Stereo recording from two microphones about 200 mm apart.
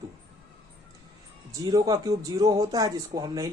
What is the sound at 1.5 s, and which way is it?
Speech, 15° right (ahead or behind).